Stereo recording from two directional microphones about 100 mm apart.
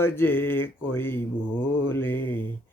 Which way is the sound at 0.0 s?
20° left (ahead or behind).